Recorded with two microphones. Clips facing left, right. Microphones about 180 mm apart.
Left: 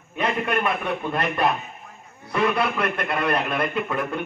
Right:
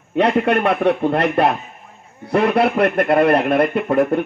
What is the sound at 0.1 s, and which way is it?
A man's voice, 70° right (ahead or behind).